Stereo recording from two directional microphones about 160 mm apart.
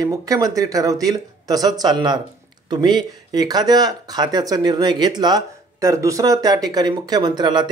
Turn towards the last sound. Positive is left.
turn(degrees=-25)  # may be behind; listen again after turning